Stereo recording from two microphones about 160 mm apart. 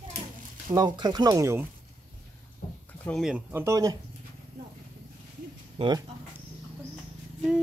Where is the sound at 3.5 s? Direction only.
15° right (ahead or behind).